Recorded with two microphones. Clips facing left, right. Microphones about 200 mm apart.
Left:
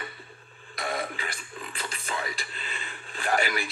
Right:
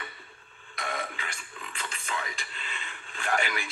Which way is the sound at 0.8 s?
35° left (ahead or behind).